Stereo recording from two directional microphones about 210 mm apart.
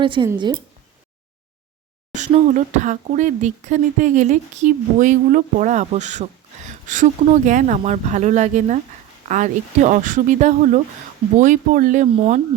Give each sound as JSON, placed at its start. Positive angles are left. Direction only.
{"t": 0.0, "sound": "speech", "side_deg": -25}
{"t": 2.1, "sound": "speech", "side_deg": -35}